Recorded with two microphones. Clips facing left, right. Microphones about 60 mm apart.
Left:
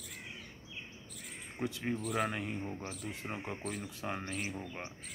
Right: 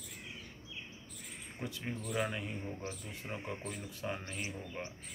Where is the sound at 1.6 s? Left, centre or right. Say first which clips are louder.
Left 5 dB; left.